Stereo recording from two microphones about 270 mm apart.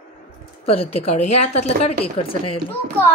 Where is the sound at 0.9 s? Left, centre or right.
Left.